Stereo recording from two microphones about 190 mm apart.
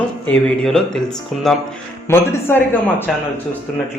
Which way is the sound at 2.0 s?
10° left (ahead or behind).